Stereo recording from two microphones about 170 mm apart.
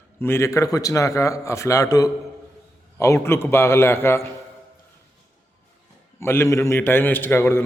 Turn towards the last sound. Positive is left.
turn(degrees=15)  # may be behind; listen again after turning